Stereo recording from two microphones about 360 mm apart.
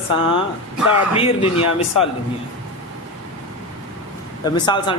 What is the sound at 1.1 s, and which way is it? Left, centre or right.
Speech, centre.